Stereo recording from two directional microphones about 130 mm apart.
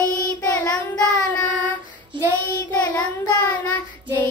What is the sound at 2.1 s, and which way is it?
Child singing, 40° right (ahead or behind).